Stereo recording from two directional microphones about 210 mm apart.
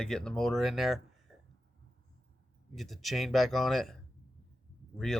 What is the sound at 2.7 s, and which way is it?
Speech, centre (ahead or behind).